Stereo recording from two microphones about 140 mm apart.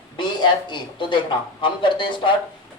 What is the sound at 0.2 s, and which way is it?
A woman's voice, 35° left (ahead or behind).